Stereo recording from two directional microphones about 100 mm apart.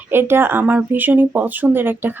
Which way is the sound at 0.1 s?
25° right (ahead or behind).